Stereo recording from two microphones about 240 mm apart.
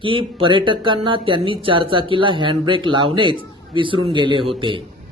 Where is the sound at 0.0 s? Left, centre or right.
Right.